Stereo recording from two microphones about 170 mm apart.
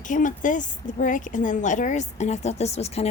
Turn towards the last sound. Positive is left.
turn(degrees=40)  # may be behind; listen again after turning